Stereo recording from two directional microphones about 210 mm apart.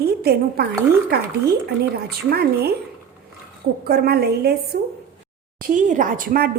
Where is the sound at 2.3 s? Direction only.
45° right (ahead or behind).